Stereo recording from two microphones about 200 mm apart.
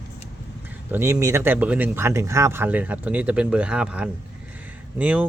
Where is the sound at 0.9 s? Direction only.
15° right (ahead or behind).